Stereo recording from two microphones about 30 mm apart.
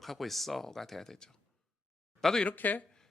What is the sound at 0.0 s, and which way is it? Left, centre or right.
Speech, centre.